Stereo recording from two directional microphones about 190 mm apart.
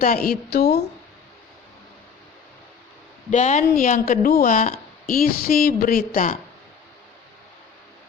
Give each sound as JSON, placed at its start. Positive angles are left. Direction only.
{"t": 0.0, "sound": "a woman's voice", "side_deg": 50}
{"t": 3.2, "sound": "speech", "side_deg": 40}